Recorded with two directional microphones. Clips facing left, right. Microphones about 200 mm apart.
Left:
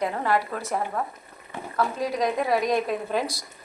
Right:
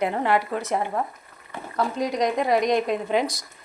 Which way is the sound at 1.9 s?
5° left (ahead or behind).